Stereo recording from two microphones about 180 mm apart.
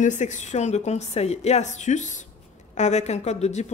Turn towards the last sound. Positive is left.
turn(degrees=40)  # may be behind; listen again after turning